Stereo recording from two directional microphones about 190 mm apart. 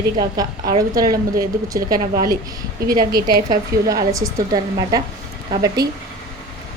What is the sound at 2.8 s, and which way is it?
Speech, 50° right (ahead or behind).